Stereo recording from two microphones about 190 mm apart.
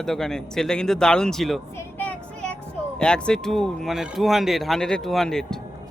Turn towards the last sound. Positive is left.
turn(degrees=5)  # may be behind; listen again after turning